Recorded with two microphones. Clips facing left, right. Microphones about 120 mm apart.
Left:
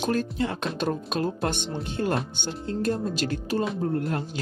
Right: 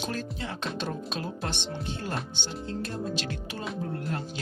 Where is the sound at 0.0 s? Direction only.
50° left (ahead or behind).